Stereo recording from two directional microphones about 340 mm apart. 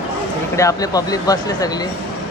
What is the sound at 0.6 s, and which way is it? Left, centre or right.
Speech, centre.